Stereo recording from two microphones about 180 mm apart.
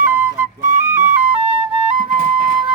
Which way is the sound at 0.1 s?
10° right (ahead or behind).